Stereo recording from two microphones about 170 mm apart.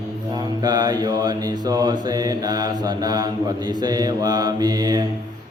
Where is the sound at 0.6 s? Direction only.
25° right (ahead or behind).